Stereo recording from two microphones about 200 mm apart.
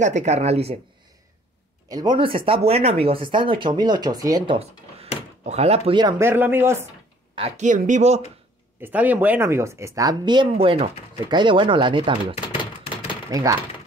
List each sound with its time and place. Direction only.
0.0 s speech: 35° right (ahead or behind)
1.9 s speech: 20° right (ahead or behind)
7.3 s speech: 30° right (ahead or behind)
8.8 s speech: 10° right (ahead or behind)